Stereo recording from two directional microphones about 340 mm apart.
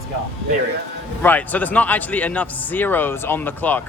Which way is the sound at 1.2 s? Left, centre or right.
Centre.